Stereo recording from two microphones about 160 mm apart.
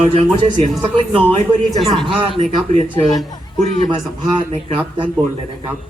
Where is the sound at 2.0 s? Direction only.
35° right (ahead or behind).